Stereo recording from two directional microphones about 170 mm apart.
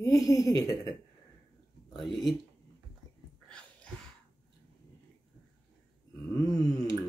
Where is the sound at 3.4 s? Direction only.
5° left (ahead or behind).